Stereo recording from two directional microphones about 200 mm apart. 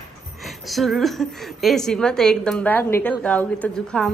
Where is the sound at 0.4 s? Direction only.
Centre (ahead or behind).